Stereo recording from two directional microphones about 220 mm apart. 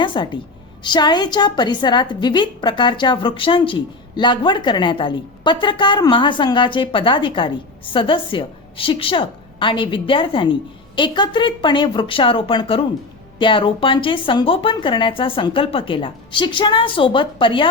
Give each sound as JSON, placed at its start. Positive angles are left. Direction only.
{"t": 0.0, "sound": "a woman's voice", "side_deg": 20}